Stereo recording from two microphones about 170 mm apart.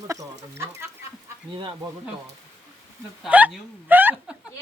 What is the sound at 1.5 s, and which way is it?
Speech, 30° right (ahead or behind).